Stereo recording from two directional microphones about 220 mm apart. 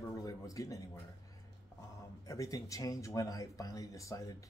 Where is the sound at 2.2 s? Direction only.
15° left (ahead or behind).